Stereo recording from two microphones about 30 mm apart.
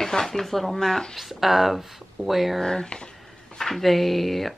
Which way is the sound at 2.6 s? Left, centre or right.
Left.